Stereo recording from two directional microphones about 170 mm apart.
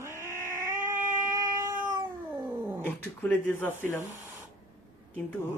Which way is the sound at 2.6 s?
15° right (ahead or behind).